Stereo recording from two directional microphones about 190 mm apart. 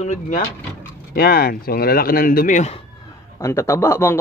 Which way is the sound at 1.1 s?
50° left (ahead or behind).